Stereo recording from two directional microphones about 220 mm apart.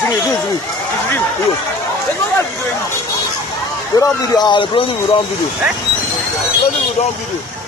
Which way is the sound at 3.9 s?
15° left (ahead or behind).